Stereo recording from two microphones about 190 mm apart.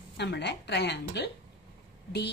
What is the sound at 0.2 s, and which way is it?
A woman's voice, 65° left (ahead or behind).